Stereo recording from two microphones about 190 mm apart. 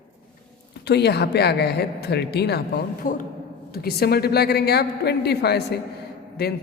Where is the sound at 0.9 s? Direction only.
60° left (ahead or behind).